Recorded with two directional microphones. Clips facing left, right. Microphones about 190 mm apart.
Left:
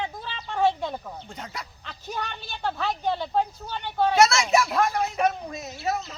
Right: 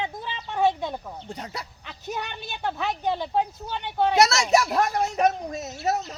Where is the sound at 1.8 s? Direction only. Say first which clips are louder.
Even; 15° right (ahead or behind).